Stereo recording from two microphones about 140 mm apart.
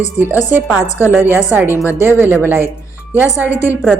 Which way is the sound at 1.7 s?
20° left (ahead or behind).